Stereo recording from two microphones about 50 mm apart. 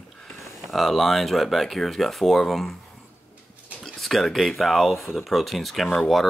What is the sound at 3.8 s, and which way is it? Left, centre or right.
Speech, centre.